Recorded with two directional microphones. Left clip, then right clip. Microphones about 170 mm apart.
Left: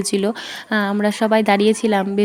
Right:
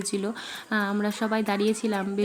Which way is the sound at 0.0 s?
40° left (ahead or behind).